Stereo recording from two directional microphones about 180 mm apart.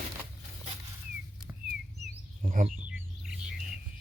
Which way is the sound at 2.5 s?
45° right (ahead or behind).